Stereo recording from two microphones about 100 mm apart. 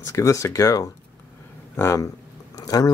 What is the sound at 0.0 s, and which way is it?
Speech, 30° left (ahead or behind).